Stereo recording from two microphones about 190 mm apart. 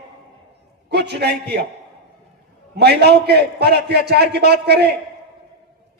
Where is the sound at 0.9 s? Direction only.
60° right (ahead or behind).